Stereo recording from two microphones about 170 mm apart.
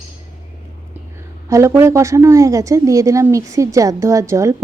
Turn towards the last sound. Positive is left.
turn(degrees=-15)  # may be behind; listen again after turning